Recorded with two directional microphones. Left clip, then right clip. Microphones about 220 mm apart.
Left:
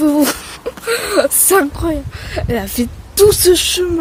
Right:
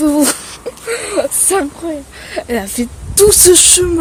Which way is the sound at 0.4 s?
10° left (ahead or behind).